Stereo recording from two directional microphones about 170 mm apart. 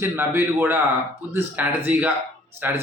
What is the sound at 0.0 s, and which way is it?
A man's voice, 15° right (ahead or behind).